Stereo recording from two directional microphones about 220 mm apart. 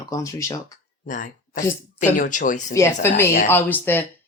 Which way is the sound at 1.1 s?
35° left (ahead or behind).